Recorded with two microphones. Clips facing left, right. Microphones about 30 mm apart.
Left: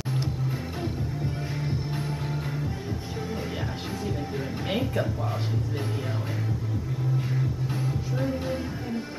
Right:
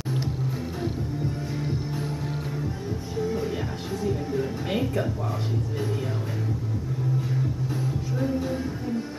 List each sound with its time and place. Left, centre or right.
1.6 s music: left
3.2 s music: left
4.4 s music: centre
8.4 s music: left